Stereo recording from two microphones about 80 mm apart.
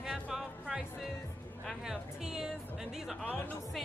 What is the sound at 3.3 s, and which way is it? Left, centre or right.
Speech, left.